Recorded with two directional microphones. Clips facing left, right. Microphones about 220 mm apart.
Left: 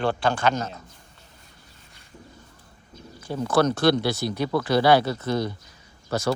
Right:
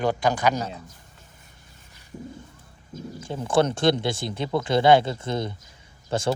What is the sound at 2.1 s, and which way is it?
Speech, 20° right (ahead or behind).